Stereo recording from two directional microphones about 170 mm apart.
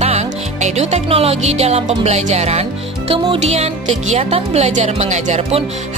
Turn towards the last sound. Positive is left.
turn(degrees=-40)  # may be behind; listen again after turning